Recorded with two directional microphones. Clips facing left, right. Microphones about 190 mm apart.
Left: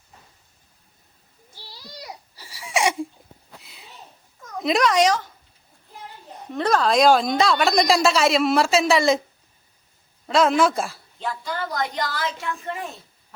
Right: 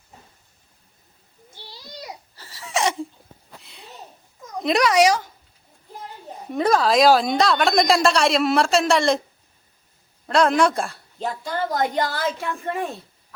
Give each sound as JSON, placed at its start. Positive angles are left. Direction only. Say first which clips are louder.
{"t": 1.7, "sound": "a sound", "louder": "right 1 dB", "side_deg": -20}
{"t": 2.3, "sound": "a sound", "louder": "left 1 dB", "side_deg": 10}
{"t": 4.5, "sound": "speech", "louder": "right 1 dB", "side_deg": 0}
{"t": 6.5, "sound": "a woman's voice", "louder": "right 2 dB", "side_deg": -10}
{"t": 10.2, "sound": "a woman's voice", "louder": "even", "side_deg": 0}
{"t": 11.2, "sound": "a woman's voice", "louder": "right 3 dB", "side_deg": -40}